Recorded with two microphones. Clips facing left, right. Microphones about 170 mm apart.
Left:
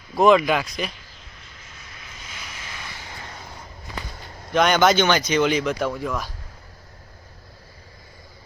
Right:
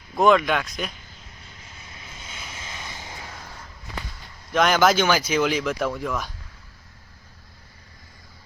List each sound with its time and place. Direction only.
0.2 s speech: centre (ahead or behind)
2.2 s vehicle: 25° right (ahead or behind)
4.5 s speech: centre (ahead or behind)